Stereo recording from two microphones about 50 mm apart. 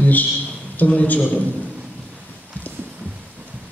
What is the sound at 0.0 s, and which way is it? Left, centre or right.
A man's voice, left.